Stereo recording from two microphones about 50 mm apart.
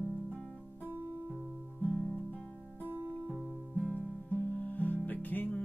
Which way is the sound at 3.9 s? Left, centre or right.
Left.